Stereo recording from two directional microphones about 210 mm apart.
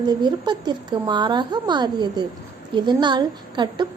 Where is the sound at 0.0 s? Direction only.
20° right (ahead or behind).